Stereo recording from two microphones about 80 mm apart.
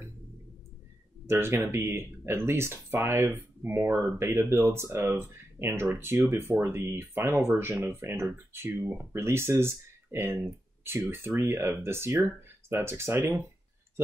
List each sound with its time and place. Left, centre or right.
1.2 s speech: right